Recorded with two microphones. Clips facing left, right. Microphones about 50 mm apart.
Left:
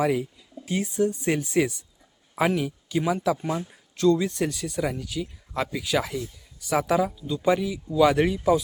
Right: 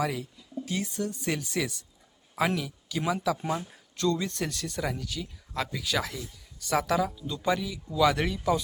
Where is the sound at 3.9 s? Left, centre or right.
Centre.